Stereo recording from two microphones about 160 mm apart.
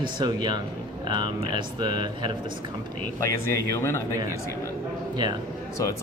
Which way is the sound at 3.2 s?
20° left (ahead or behind).